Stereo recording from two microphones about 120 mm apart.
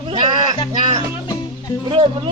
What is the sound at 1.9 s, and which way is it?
Speech, 50° right (ahead or behind).